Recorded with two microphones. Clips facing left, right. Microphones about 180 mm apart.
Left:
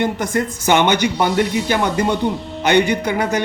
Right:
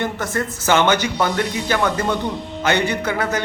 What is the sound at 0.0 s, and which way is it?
A man's voice, 15° left (ahead or behind).